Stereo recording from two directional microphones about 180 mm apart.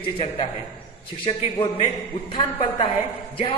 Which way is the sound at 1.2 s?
30° left (ahead or behind).